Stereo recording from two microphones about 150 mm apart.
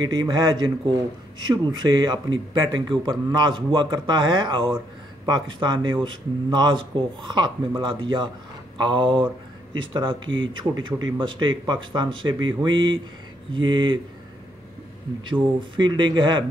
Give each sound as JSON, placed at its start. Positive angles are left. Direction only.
{"t": 0.0, "sound": "a man's voice", "side_deg": -30}
{"t": 15.7, "sound": "speech", "side_deg": -30}